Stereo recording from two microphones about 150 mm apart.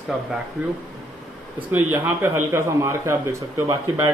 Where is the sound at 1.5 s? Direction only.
10° right (ahead or behind).